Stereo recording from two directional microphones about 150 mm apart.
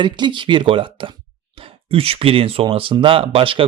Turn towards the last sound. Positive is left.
turn(degrees=-35)  # may be behind; listen again after turning